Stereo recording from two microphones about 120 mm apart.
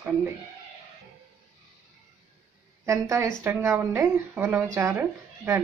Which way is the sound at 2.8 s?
25° right (ahead or behind).